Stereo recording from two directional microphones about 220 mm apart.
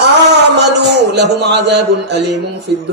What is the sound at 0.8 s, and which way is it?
A man's voice, 50° right (ahead or behind).